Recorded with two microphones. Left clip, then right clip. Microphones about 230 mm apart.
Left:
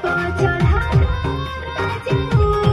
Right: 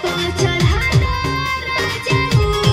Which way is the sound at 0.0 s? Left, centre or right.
Right.